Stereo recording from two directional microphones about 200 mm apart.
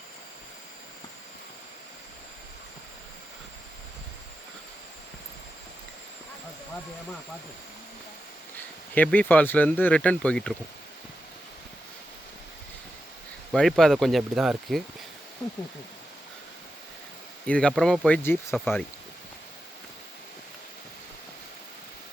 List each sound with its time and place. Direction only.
9.0 s speech: 10° left (ahead or behind)
13.5 s speech: centre (ahead or behind)
17.4 s speech: 5° left (ahead or behind)